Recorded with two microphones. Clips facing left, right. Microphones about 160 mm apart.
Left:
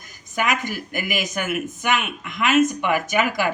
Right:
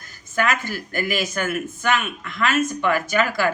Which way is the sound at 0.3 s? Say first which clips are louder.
Right 1 dB; 15° left (ahead or behind).